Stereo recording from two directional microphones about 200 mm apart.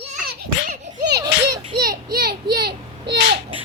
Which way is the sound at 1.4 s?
50° right (ahead or behind).